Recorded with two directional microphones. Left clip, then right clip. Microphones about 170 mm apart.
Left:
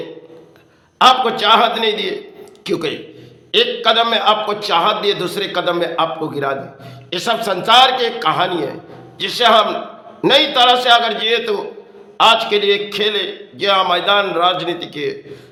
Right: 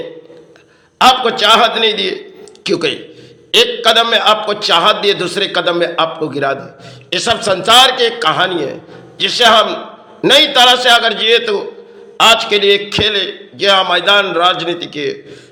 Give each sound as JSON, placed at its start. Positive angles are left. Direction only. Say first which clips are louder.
{"t": 0.9, "sound": "a man's voice", "louder": "right 2 dB", "side_deg": -10}